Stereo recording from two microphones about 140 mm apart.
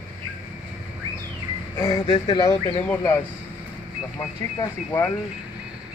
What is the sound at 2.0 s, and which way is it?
Speech, 40° left (ahead or behind).